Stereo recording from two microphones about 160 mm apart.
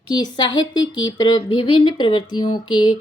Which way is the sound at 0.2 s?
25° left (ahead or behind).